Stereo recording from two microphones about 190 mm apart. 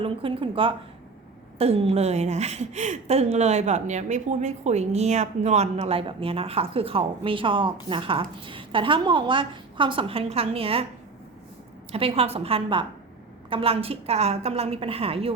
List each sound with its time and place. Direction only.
0.0 s a woman's voice: 30° right (ahead or behind)
11.9 s a woman's voice: 30° right (ahead or behind)